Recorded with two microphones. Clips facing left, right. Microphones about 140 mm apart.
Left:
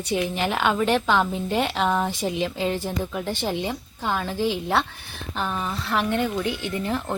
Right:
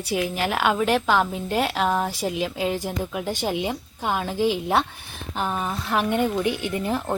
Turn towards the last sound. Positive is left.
turn(degrees=-10)  # may be behind; listen again after turning